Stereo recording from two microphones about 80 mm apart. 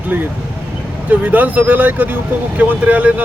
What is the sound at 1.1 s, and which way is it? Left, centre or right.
Speech, centre.